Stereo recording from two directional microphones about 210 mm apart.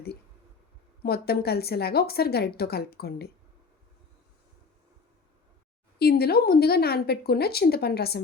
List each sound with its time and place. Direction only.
1.0 s speech: 50° left (ahead or behind)
6.0 s speech: 50° left (ahead or behind)